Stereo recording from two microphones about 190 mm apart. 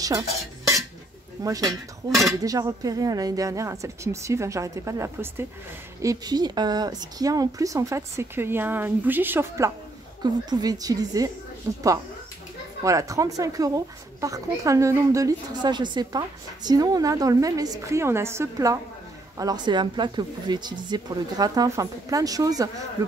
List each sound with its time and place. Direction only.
1.4 s speech: 15° right (ahead or behind)
12.8 s speech: 15° right (ahead or behind)